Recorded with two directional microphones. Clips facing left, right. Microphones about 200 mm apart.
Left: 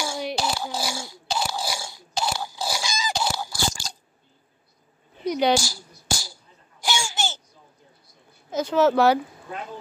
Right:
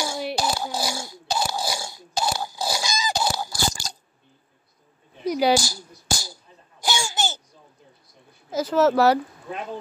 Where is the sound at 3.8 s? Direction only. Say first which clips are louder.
Right 1 dB; 35° right (ahead or behind).